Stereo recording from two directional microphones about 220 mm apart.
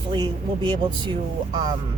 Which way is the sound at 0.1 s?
20° right (ahead or behind).